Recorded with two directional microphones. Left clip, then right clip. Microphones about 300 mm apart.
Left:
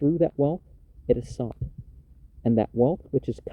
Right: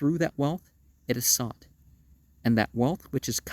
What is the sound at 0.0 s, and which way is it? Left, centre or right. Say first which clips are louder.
Speech: left 4 dB; right.